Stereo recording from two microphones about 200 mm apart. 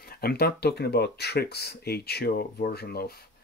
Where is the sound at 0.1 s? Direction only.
50° left (ahead or behind).